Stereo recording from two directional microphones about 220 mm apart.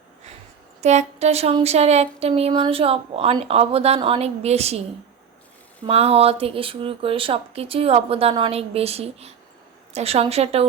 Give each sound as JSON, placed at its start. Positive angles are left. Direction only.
{"t": 0.8, "sound": "speech", "side_deg": -30}
{"t": 5.8, "sound": "speech", "side_deg": -25}